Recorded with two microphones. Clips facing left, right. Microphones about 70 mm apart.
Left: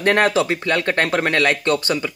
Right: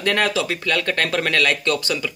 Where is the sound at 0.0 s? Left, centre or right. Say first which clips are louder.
Left 4 dB; left.